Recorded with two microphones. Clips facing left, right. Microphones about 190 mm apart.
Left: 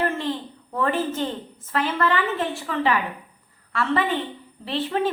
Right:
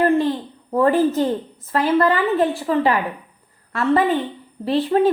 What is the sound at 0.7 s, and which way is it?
A woman's voice, 35° right (ahead or behind).